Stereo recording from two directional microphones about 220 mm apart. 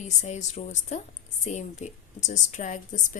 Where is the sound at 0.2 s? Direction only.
30° left (ahead or behind).